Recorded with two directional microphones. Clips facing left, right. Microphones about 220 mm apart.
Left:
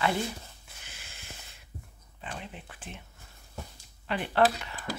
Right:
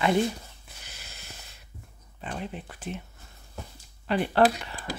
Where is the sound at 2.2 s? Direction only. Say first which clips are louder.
Right 6 dB; 40° right (ahead or behind).